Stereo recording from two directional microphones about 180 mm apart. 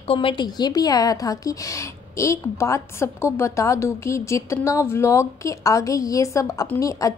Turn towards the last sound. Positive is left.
turn(degrees=20)  # may be behind; listen again after turning